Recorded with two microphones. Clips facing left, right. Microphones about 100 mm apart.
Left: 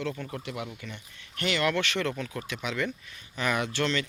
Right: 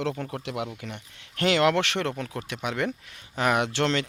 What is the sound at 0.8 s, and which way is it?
Speech, 80° right.